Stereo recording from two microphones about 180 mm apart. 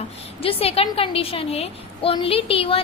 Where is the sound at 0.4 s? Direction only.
30° left (ahead or behind).